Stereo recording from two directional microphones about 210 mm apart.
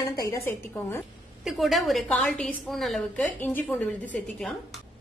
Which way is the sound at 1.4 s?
Centre (ahead or behind).